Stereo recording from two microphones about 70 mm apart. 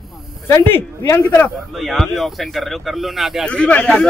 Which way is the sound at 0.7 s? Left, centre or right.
Left.